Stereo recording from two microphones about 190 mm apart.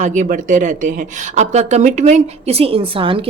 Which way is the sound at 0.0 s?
40° right (ahead or behind).